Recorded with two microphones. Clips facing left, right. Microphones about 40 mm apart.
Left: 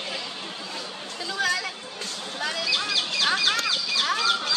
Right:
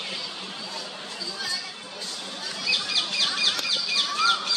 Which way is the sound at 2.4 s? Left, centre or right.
Left.